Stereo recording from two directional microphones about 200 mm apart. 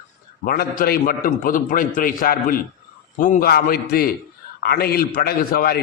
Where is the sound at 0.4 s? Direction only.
50° left (ahead or behind).